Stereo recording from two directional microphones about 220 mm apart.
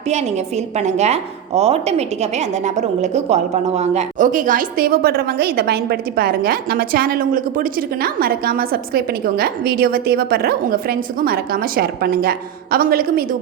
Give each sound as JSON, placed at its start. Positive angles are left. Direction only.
{"t": 0.1, "sound": "a woman's voice", "side_deg": -30}